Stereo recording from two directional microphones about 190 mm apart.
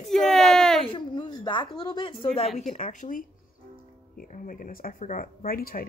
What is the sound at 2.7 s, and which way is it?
Speech, 45° left (ahead or behind).